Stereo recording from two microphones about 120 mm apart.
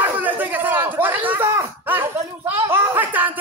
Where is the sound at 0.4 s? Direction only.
15° right (ahead or behind).